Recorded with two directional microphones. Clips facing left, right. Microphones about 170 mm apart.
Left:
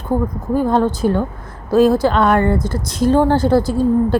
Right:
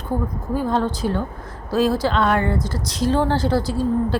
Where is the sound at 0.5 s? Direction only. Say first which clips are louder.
Left 6 dB; 50° left (ahead or behind).